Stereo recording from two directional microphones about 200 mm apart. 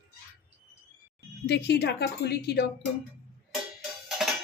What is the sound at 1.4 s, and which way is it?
A woman's voice, 60° left (ahead or behind).